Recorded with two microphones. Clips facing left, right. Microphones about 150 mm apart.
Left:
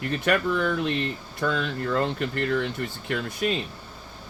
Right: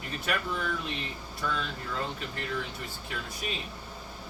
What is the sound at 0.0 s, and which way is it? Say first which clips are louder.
Speech: left 9 dB; 70° left (ahead or behind).